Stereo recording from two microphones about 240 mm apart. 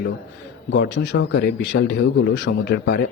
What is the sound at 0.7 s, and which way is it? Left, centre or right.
Speech, left.